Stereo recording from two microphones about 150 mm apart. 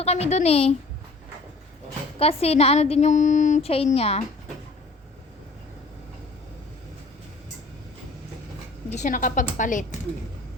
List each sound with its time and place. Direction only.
0.0 s speech: 45° left (ahead or behind)
2.1 s speech: 40° left (ahead or behind)
3.8 s speech: 40° left (ahead or behind)
9.0 s a woman's voice: 60° left (ahead or behind)